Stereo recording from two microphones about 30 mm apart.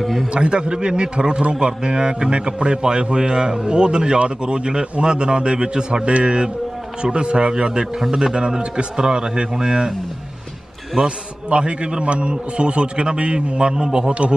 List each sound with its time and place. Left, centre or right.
0.0 s a man's voice: centre
0.3 s a man's voice: right
11.0 s a man's voice: right